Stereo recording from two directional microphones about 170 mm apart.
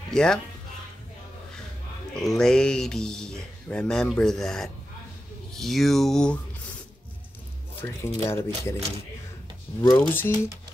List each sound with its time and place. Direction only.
0.1 s speech: 5° left (ahead or behind)
2.1 s speech: 5° left (ahead or behind)
7.8 s speech: 15° left (ahead or behind)
9.8 s speech: 15° left (ahead or behind)